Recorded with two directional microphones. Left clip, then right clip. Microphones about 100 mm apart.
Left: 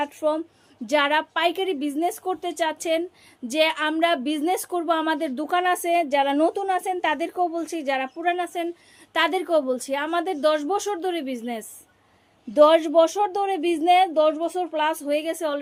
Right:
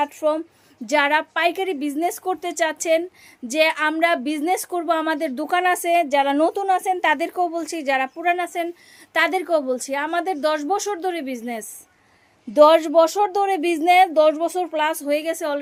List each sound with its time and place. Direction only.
0.0 s a woman's voice: 30° right (ahead or behind)
12.5 s a woman's voice: 30° right (ahead or behind)